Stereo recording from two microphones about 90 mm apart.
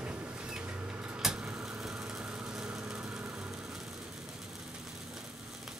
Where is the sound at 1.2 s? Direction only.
5° right (ahead or behind).